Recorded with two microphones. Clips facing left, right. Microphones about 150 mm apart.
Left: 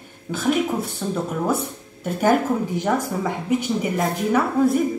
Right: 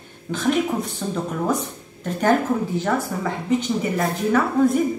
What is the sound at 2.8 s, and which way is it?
A woman's voice, 10° left (ahead or behind).